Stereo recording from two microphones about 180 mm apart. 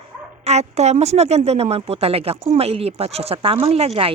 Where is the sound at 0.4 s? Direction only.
35° right (ahead or behind).